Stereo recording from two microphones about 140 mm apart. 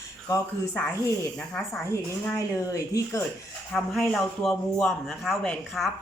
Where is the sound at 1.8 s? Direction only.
20° left (ahead or behind).